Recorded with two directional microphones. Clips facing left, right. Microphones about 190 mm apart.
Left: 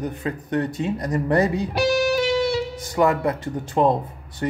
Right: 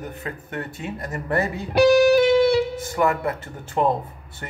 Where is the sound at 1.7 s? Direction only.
60° right (ahead or behind).